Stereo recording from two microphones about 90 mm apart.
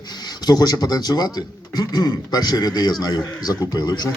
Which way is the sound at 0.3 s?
50° left (ahead or behind).